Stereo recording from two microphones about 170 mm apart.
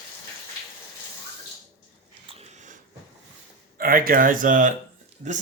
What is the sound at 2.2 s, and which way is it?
Biting, 40° right (ahead or behind).